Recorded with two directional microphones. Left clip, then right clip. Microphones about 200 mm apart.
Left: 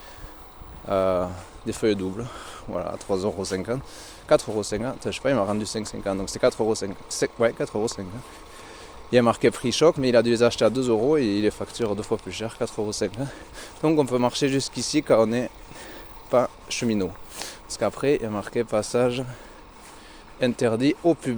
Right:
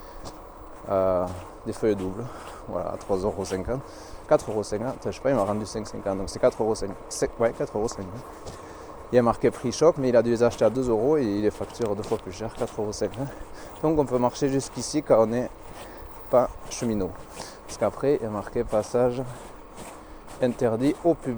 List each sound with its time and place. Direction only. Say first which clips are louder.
0.9 s speech: left 1 dB; 40° left (ahead or behind)
9.0 s speech: left 2 dB; 45° left (ahead or behind)
20.4 s speech: left 1 dB; 45° left (ahead or behind)